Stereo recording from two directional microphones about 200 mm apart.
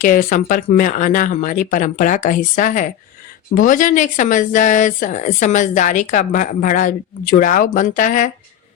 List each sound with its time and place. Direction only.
0.0 s speech: 45° left (ahead or behind)